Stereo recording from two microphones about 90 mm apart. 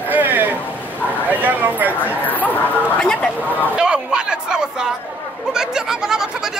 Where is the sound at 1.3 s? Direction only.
20° right (ahead or behind).